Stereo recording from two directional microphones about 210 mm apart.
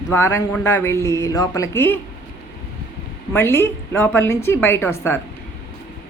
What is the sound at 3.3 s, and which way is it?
Speech, 10° left (ahead or behind).